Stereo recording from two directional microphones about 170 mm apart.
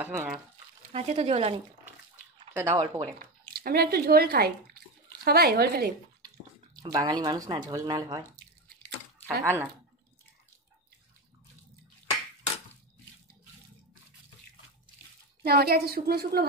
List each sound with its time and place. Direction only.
0.0 s speech: 10° right (ahead or behind)
0.9 s speech: 40° right (ahead or behind)
2.5 s speech: 15° right (ahead or behind)
3.2 s speech: 60° right (ahead or behind)
6.2 s speech: 25° right (ahead or behind)
9.4 s speech: 15° right (ahead or behind)
15.4 s a woman's voice: 65° right (ahead or behind)